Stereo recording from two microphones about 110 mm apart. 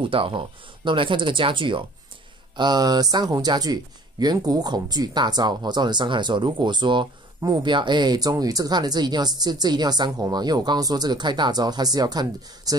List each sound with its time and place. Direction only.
0.0 s speech: 55° right (ahead or behind)